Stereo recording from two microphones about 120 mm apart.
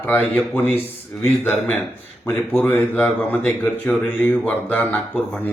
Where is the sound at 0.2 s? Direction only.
10° left (ahead or behind).